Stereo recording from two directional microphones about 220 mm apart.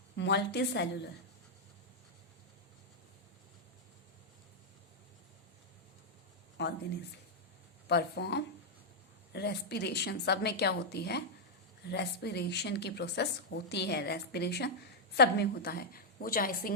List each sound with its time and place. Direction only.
0.2 s a woman's voice: 50° left (ahead or behind)
6.6 s speech: 50° left (ahead or behind)
7.9 s a woman's voice: 50° left (ahead or behind)